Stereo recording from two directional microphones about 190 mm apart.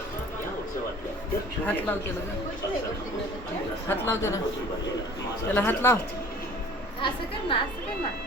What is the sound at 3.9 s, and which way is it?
Speech, 15° left (ahead or behind).